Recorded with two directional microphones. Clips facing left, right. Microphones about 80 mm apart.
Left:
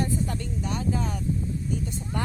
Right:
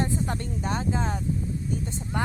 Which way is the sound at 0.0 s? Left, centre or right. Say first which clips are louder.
Even; right.